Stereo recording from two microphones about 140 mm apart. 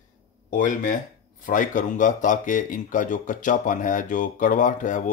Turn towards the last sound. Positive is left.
turn(degrees=65)  # may be behind; listen again after turning